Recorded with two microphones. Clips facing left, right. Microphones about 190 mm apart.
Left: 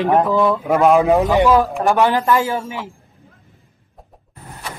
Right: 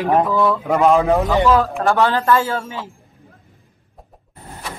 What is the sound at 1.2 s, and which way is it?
A man's voice, 15° left (ahead or behind).